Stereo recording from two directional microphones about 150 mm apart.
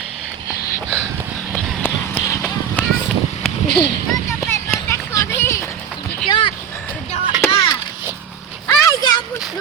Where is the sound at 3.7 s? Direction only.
30° left (ahead or behind).